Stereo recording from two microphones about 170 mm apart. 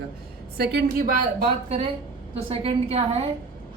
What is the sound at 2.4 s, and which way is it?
Speech, 35° right (ahead or behind).